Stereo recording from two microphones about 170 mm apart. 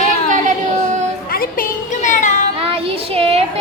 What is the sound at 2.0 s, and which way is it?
Child singing, 45° left (ahead or behind).